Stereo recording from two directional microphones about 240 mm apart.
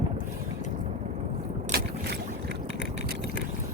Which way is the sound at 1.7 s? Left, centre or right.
Right.